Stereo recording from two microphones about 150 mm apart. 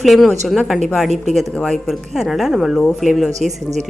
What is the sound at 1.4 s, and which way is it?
A woman's voice, centre (ahead or behind).